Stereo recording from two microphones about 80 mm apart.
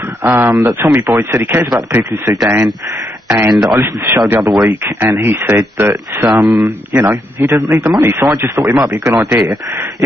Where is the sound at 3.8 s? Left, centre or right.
Right.